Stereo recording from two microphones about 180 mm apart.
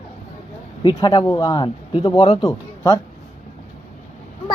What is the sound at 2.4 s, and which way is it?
Speech, 20° left (ahead or behind).